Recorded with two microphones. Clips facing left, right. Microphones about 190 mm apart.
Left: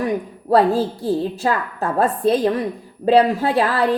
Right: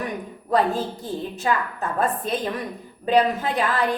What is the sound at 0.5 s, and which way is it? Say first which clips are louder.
A woman's voice: left 6 dB; 35° left (ahead or behind).